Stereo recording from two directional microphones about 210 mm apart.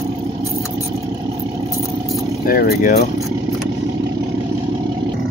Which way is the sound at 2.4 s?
45° left (ahead or behind).